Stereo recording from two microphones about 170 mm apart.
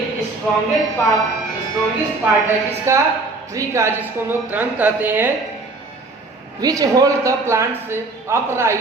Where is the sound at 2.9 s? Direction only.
15° right (ahead or behind).